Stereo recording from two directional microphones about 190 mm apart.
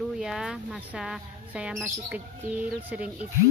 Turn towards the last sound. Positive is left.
turn(degrees=-5)  # may be behind; listen again after turning